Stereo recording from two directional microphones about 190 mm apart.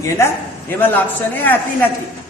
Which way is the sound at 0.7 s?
10° left (ahead or behind).